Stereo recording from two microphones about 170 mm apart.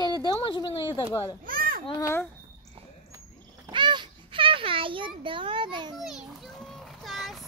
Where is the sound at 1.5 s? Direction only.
55° right (ahead or behind).